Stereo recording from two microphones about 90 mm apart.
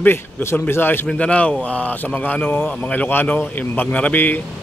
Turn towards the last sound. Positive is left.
turn(degrees=20)  # may be behind; listen again after turning